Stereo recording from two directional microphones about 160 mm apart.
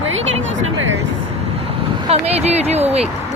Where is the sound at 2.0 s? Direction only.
40° right (ahead or behind).